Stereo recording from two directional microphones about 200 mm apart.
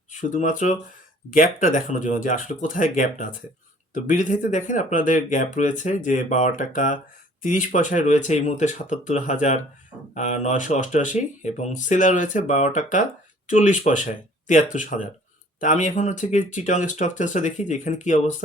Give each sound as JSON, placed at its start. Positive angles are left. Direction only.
{"t": 0.1, "sound": "speech", "side_deg": 40}